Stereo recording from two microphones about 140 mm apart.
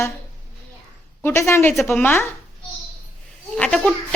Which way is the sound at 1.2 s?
15° left (ahead or behind).